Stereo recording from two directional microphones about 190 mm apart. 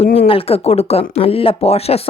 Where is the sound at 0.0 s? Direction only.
30° left (ahead or behind).